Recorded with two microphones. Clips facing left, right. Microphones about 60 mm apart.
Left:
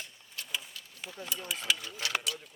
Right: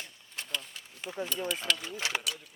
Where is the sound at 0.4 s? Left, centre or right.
Right.